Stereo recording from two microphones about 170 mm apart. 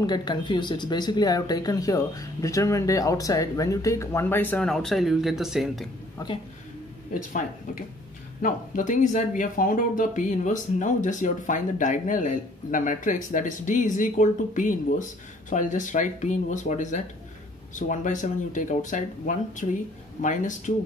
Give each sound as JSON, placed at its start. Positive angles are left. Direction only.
{"t": 0.0, "sound": "speech", "side_deg": 25}
{"t": 6.2, "sound": "speech", "side_deg": 20}
{"t": 8.4, "sound": "speech", "side_deg": 50}